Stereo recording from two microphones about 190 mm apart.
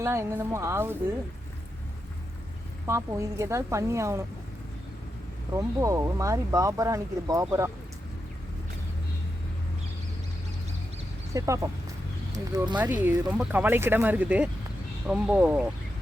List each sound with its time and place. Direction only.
0.0 s speech: 15° right (ahead or behind)
2.8 s speech: 15° right (ahead or behind)
5.5 s speech: 15° right (ahead or behind)
11.3 s speech: 15° right (ahead or behind)
12.7 s speech: 10° right (ahead or behind)